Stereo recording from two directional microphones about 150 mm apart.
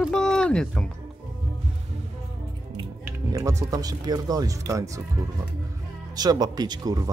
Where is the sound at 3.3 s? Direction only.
20° right (ahead or behind).